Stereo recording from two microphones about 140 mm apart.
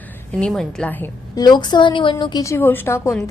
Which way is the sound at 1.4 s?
30° left (ahead or behind).